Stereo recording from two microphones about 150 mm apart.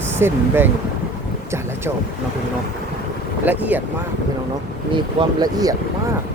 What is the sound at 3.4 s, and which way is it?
Speech, 10° right (ahead or behind).